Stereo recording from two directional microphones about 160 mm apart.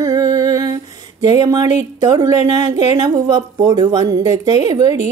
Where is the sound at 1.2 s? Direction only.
25° right (ahead or behind).